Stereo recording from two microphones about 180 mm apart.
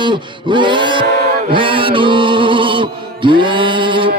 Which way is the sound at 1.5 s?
30° right (ahead or behind).